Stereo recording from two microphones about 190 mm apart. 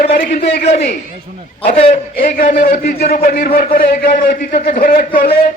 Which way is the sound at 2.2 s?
50° left (ahead or behind).